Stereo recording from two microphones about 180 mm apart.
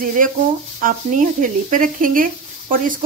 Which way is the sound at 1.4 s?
45° right (ahead or behind).